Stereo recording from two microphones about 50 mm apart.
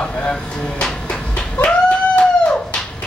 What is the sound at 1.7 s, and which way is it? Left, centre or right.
Dog, centre.